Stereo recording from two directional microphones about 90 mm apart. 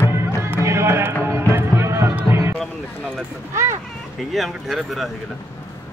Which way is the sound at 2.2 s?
25° right (ahead or behind).